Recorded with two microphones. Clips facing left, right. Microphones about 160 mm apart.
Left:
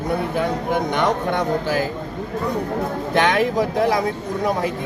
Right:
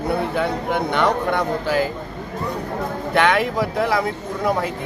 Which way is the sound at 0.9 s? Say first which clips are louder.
Right 3 dB; 20° left (ahead or behind).